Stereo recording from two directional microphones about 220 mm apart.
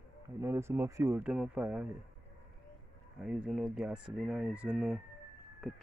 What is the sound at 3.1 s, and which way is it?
Speech, centre (ahead or behind).